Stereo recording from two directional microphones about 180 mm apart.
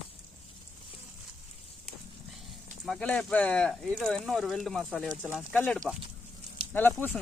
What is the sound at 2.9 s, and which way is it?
Speech, 5° left (ahead or behind).